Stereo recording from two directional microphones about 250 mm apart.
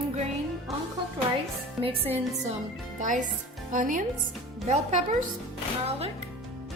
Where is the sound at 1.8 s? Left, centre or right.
Right.